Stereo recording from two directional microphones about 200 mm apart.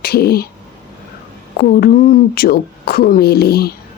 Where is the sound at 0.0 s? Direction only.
50° left (ahead or behind).